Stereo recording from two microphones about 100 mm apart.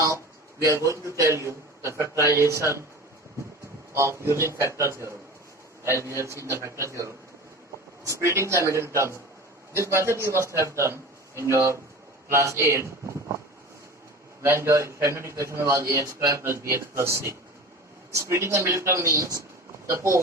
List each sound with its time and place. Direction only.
0.6 s a man's voice: 30° right (ahead or behind)
3.9 s a man's voice: 30° right (ahead or behind)
14.4 s a man's voice: 25° right (ahead or behind)